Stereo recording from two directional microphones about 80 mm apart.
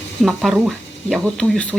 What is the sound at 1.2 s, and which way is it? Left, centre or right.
Speech, centre.